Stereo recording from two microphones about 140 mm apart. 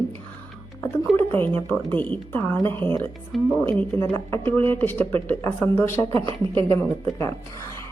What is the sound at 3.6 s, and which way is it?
Speech, 10° left (ahead or behind).